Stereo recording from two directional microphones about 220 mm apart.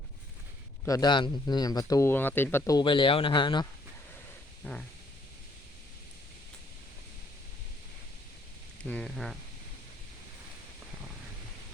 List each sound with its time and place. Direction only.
0.9 s speech: 15° left (ahead or behind)
4.6 s speech: 5° left (ahead or behind)
8.8 s speech: 5° left (ahead or behind)